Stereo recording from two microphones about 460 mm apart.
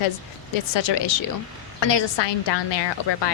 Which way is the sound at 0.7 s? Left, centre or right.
Left.